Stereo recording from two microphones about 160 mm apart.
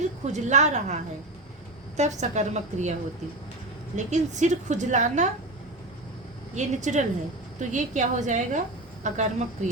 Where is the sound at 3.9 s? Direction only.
50° right (ahead or behind).